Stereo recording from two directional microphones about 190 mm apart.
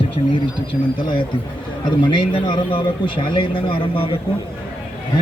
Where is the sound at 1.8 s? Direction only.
25° left (ahead or behind).